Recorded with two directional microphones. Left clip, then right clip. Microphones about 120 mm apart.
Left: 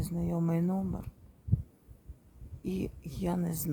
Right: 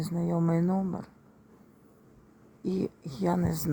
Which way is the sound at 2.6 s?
Centre (ahead or behind).